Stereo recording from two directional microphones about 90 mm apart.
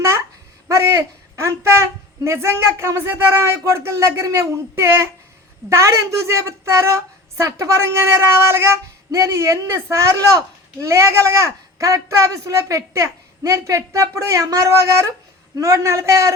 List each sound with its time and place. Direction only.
0.7 s a woman's voice: 35° right (ahead or behind)